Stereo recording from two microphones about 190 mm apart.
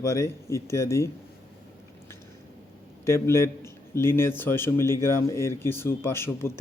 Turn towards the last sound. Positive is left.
turn(degrees=15)  # may be behind; listen again after turning